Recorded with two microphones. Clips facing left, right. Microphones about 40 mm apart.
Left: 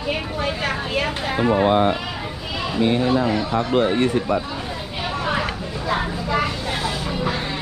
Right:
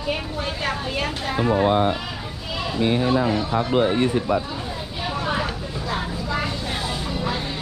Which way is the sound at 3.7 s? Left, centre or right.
Left.